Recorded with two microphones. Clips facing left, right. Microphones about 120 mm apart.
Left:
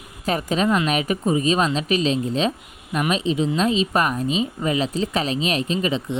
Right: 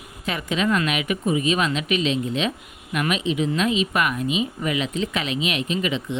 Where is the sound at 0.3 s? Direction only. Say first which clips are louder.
Left 3 dB; 40° left (ahead or behind).